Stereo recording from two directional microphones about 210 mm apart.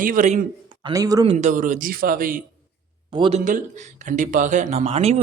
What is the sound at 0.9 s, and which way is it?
Speech, 15° right (ahead or behind).